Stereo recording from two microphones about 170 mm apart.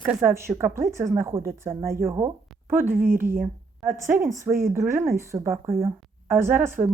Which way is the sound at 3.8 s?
15° right (ahead or behind).